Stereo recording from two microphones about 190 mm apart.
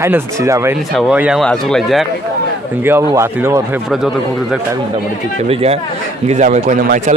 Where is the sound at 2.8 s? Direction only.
15° right (ahead or behind).